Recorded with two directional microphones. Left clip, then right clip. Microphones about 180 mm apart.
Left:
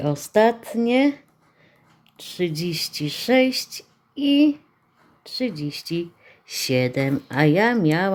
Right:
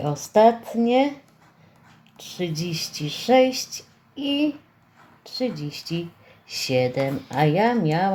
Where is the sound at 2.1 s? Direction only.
35° left (ahead or behind).